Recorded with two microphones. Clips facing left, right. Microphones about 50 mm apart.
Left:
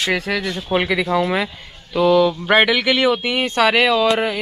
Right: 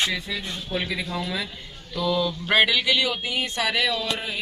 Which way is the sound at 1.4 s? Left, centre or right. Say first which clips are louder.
Left 7 dB; left.